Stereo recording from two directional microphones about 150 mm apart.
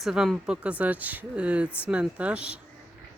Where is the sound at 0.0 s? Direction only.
Centre (ahead or behind).